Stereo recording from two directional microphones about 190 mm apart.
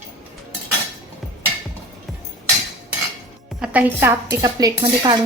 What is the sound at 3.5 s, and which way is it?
Speech, 5° right (ahead or behind).